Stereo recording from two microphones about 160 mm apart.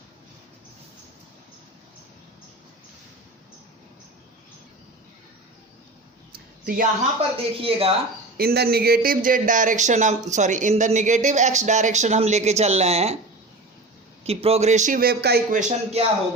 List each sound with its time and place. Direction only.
6.3 s a sound: 65° right (ahead or behind)
7.2 s speech: 35° right (ahead or behind)
8.4 s speech: 75° right (ahead or behind); by 13.1 s 40° right (ahead or behind)
14.3 s speech: 40° right (ahead or behind); by 15.4 s 80° right
15.5 s speech: 45° right (ahead or behind)